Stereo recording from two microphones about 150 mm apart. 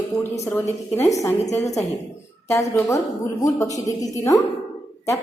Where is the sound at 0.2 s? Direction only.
15° left (ahead or behind).